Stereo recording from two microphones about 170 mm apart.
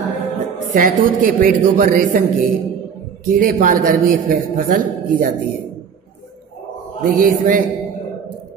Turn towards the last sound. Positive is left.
turn(degrees=-55)  # may be behind; listen again after turning